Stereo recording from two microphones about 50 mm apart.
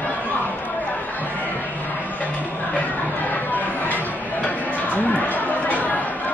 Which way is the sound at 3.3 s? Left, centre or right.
Left.